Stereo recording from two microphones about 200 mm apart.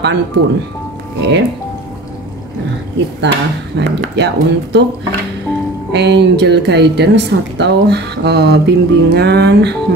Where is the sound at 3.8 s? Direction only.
60° right (ahead or behind).